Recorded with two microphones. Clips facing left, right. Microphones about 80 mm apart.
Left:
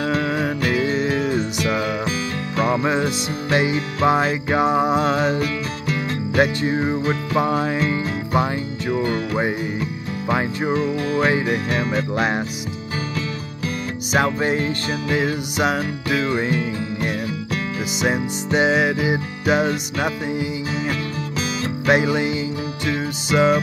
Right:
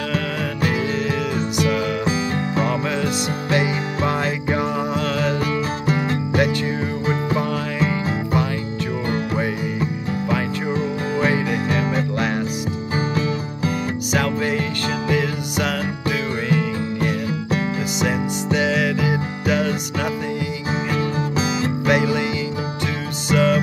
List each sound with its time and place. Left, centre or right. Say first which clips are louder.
0.9 s music: left 2 dB; left
2.6 s music: left 6 dB; left
11.2 s music: even; left
14.1 s music: left 2 dB; left
21.8 s music: left 2 dB; left
23.3 s music: left 1 dB; left